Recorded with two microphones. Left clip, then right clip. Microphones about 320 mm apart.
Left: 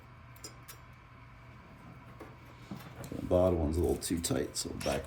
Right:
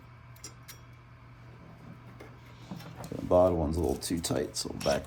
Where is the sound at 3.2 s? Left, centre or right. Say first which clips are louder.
Right 4 dB; centre.